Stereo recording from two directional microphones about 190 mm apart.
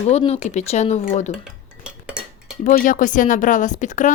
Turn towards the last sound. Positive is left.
turn(degrees=40)  # may be behind; listen again after turning